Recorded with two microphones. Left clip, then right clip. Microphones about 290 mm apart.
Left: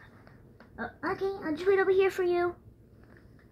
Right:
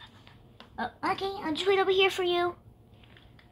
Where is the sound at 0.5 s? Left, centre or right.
Centre.